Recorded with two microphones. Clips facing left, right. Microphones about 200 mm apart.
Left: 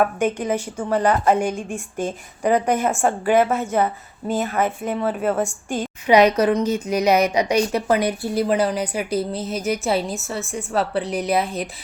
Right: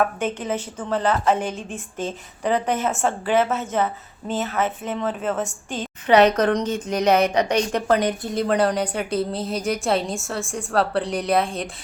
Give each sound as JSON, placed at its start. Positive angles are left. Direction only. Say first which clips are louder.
{"t": 0.0, "sound": "a woman's voice", "louder": "left 3 dB", "side_deg": 10}
{"t": 9.3, "sound": "speech", "louder": "even", "side_deg": -30}
{"t": 9.8, "sound": "a woman's voice", "louder": "even", "side_deg": 5}